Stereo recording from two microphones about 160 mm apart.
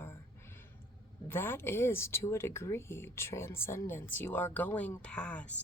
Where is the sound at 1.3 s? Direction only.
15° left (ahead or behind).